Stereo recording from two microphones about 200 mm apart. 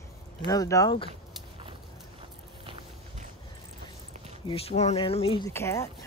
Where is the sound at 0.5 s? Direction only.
15° left (ahead or behind).